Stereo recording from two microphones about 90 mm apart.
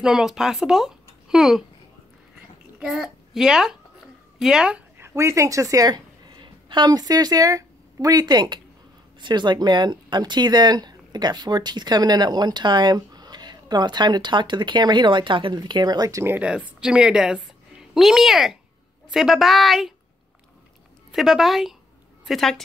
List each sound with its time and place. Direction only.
0.0 s speech: 5° right (ahead or behind)
2.8 s a child's voice: 5° right (ahead or behind)
4.9 s a woman's voice: 30° right (ahead or behind); by 16.2 s 50° right (ahead or behind)
16.3 s a woman's voice: 15° right (ahead or behind)
21.1 s a woman's voice: 5° right (ahead or behind)